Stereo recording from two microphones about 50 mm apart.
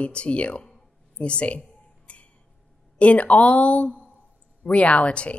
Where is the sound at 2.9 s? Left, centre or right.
Left.